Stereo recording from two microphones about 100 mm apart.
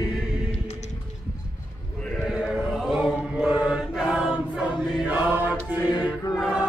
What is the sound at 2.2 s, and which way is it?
Mantra, centre (ahead or behind).